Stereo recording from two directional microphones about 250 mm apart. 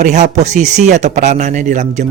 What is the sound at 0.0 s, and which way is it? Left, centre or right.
Speech, right.